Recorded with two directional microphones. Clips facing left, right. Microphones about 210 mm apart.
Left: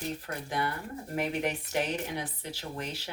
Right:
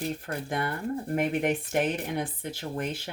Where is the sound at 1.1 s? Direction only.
50° right (ahead or behind).